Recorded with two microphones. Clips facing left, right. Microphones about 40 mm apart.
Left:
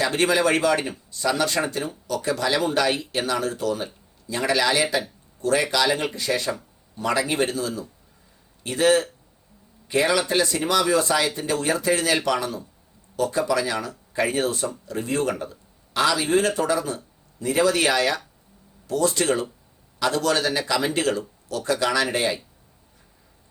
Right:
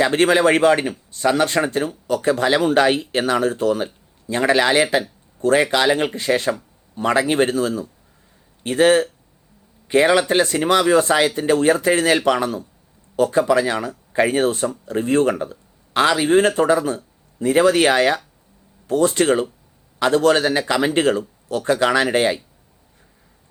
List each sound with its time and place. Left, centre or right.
0.0 s speech: right